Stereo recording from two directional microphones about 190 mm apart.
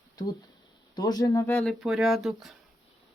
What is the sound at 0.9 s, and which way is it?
Speech, 20° left (ahead or behind).